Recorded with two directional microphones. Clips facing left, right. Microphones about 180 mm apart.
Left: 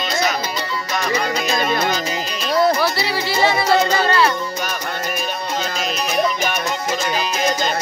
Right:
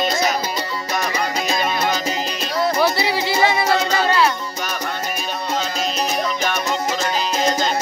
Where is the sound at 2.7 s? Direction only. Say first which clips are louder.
Right 2 dB; 20° right (ahead or behind).